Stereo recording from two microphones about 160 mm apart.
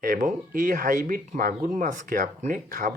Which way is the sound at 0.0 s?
60° right (ahead or behind).